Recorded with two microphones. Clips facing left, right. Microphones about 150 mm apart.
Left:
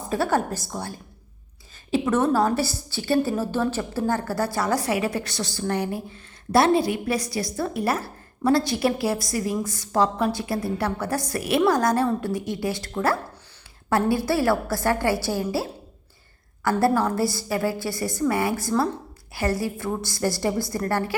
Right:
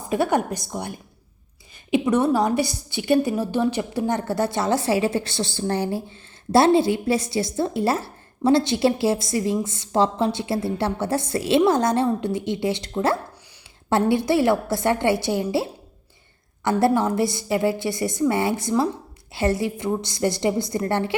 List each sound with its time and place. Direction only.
0.1 s a woman's voice: 15° right (ahead or behind)
16.6 s a woman's voice: 20° right (ahead or behind)